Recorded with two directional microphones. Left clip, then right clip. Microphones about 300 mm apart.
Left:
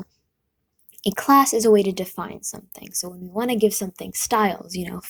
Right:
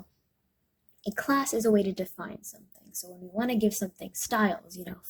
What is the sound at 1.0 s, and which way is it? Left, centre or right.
Speech, left.